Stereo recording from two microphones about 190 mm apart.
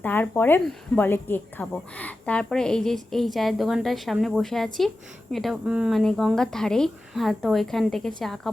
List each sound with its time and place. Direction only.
0.0 s speech: 10° left (ahead or behind)